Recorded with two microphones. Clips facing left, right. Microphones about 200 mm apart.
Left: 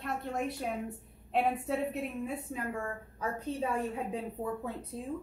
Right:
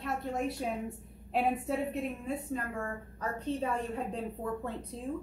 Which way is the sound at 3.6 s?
5° left (ahead or behind).